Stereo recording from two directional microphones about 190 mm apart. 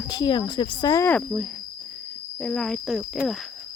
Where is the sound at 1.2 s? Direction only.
Centre (ahead or behind).